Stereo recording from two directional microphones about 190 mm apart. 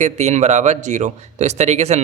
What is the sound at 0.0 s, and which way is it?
A man's voice, 35° right (ahead or behind).